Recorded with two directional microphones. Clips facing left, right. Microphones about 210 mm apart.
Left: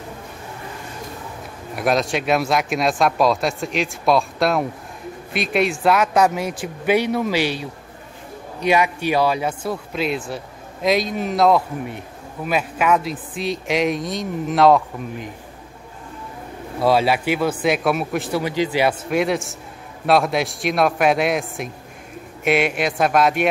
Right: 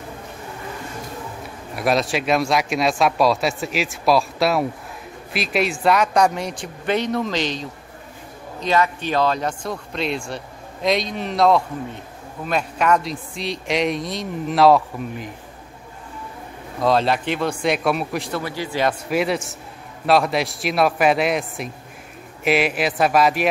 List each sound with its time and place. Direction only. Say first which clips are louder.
1.8 s speech: even; centre (ahead or behind)
16.8 s speech: left 1 dB; 5° left (ahead or behind)
18.4 s speech: left 6 dB; 15° left (ahead or behind)
18.9 s speech: left 1 dB; centre (ahead or behind)